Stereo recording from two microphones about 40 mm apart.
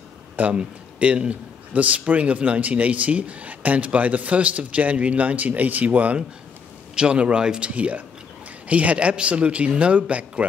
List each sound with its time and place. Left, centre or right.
0.4 s a man's voice: right
7.4 s a man's voice: centre
7.7 s a man's voice: right